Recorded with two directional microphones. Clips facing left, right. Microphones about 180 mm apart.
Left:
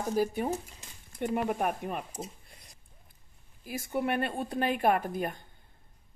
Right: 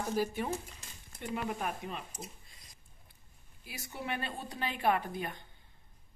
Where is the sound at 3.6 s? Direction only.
50° left (ahead or behind).